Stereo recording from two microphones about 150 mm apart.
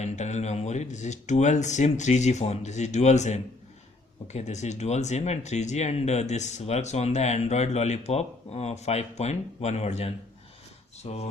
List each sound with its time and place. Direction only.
0.0 s speech: 50° left (ahead or behind)